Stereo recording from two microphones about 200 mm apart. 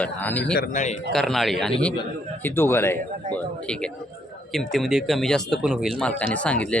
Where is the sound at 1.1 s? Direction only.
Centre (ahead or behind).